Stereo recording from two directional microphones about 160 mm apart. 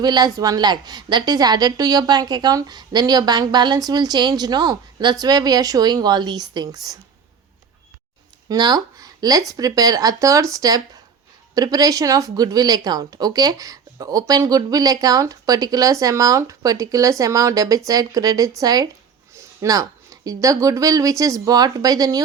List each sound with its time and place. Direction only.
0.0 s speech: 25° right (ahead or behind)
8.4 s speech: 25° right (ahead or behind)